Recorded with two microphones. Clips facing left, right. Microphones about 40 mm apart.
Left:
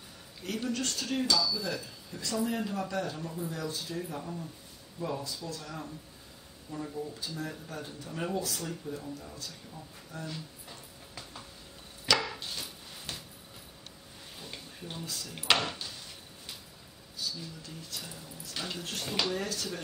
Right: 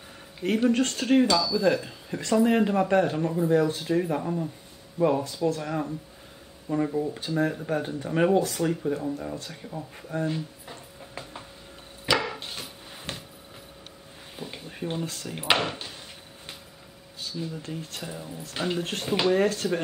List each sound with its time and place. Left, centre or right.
0.4 s speech: right
12.1 s wood: centre
12.4 s a sound: right
14.3 s a sound: right
14.7 s speech: right
15.3 s speech: right
17.2 s speech: right
18.0 s speech: right
19.0 s speech: right
19.3 s speech: right